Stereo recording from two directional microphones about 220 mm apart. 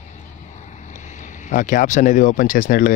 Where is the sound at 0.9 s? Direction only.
35° left (ahead or behind).